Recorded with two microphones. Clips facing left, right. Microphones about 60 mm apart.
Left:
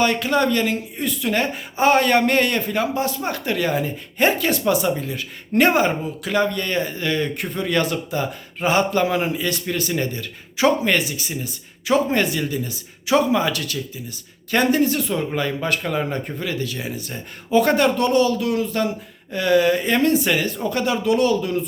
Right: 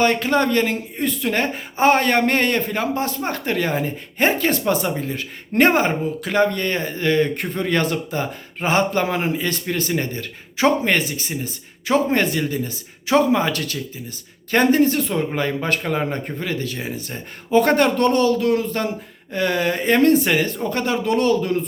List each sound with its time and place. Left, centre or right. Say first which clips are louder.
0.0 s speech: right 1 dB; right